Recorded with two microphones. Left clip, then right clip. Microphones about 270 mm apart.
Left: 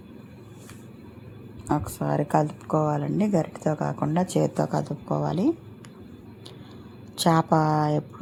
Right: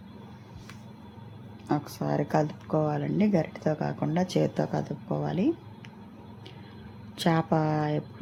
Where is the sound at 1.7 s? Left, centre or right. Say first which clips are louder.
Left 3 dB; centre.